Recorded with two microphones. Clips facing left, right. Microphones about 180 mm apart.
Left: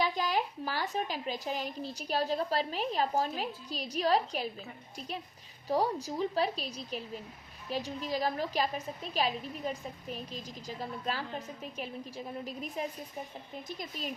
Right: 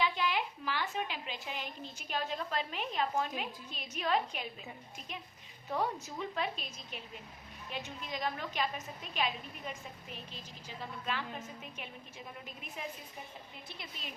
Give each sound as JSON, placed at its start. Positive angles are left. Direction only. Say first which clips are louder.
{"t": 0.0, "sound": "a woman's voice", "louder": "left 3 dB", "side_deg": 40}